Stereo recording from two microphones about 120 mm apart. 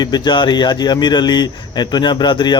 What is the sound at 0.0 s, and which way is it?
Speech, 40° left (ahead or behind).